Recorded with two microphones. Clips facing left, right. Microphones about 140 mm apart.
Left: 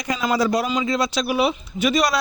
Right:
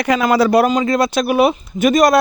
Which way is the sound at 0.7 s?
50° right (ahead or behind).